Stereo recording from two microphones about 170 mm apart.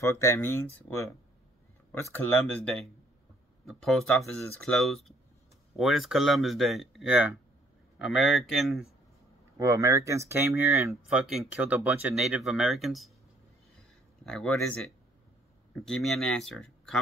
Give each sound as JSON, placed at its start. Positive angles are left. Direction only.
{"t": 0.0, "sound": "speech", "side_deg": 15}
{"t": 2.1, "sound": "speech", "side_deg": 10}
{"t": 9.6, "sound": "speech", "side_deg": -20}
{"t": 11.1, "sound": "speech", "side_deg": 0}
{"t": 14.2, "sound": "speech", "side_deg": 5}